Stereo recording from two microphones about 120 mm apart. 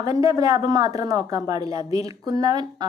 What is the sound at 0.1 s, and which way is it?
Speech, 30° right (ahead or behind).